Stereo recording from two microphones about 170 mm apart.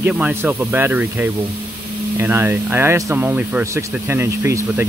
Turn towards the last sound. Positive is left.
turn(degrees=-15)  # may be behind; listen again after turning